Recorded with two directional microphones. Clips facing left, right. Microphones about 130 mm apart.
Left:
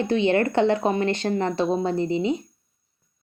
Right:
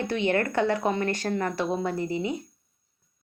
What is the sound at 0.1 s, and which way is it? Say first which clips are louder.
Speech: left 5 dB; 20° left (ahead or behind).